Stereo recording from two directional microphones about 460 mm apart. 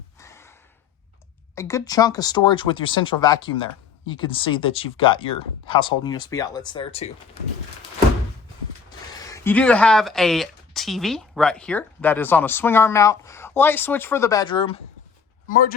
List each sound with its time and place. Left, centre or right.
0.2 s gasp: centre
1.5 s speech: centre
9.3 s speech: centre